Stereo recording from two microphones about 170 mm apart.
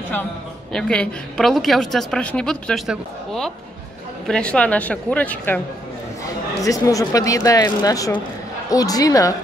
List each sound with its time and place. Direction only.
0.7 s a woman's voice: 5° left (ahead or behind)
6.6 s speech: 20° left (ahead or behind)